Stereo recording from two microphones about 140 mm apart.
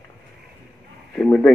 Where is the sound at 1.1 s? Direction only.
5° left (ahead or behind).